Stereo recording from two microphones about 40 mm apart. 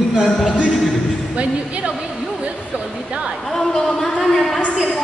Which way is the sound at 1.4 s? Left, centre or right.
Right.